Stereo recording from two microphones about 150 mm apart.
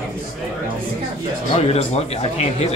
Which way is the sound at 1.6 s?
45° left (ahead or behind).